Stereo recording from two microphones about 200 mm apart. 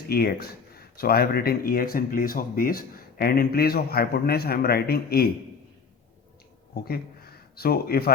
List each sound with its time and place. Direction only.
0.1 s speech: 50° left (ahead or behind)
7.5 s speech: 50° left (ahead or behind)